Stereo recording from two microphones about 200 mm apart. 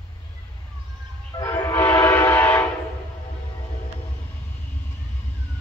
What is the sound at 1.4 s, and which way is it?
Train, 10° left (ahead or behind).